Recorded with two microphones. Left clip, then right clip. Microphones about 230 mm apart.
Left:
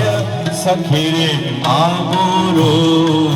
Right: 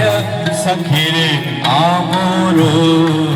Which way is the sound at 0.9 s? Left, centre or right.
Left.